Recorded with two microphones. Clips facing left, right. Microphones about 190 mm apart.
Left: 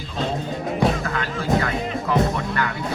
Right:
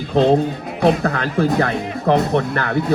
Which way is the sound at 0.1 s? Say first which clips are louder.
Right 12 dB; 60° right (ahead or behind).